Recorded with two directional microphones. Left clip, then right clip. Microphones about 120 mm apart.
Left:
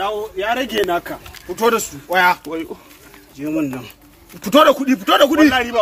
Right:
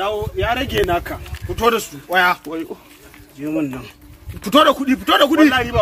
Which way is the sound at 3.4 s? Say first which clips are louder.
Left 1 dB; 35° left (ahead or behind).